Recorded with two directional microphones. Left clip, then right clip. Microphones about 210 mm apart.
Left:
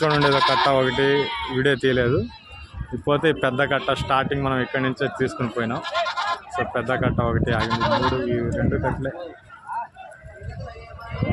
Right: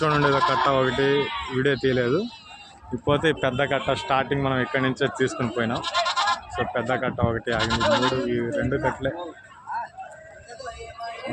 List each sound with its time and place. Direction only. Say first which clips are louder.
0.0 s speech: left 2 dB; 10° left (ahead or behind)
0.3 s speech: left 2 dB; 30° left (ahead or behind)
0.7 s speech: left 2 dB; 10° left (ahead or behind)
1.2 s speech: left 2 dB; 35° left (ahead or behind)
1.5 s speech: left 2 dB; 15° left (ahead or behind)
5.8 s bleat: right 3 dB; 50° right (ahead or behind)
6.6 s speech: left 2 dB; 5° left (ahead or behind)
7.7 s speech: right 1 dB; 45° right (ahead or behind)
8.3 s speech: left 1 dB; centre (ahead or behind)